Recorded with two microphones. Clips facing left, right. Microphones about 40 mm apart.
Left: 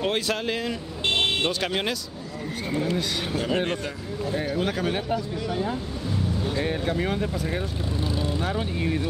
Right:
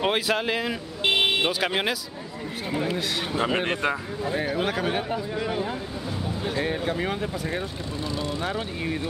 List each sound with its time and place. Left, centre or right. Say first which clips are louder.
0.0 s speech: right 2 dB; centre
3.3 s speech: right 1 dB; right
5.3 s speech: right 1 dB; right
6.5 s speech: right 1 dB; centre